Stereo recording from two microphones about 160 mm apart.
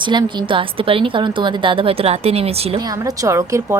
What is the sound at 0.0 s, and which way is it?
A woman's voice, 30° right (ahead or behind).